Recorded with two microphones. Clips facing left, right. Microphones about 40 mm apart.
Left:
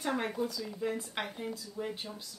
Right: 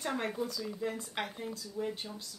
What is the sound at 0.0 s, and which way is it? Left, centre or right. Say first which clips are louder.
Speech: left 2 dB; centre.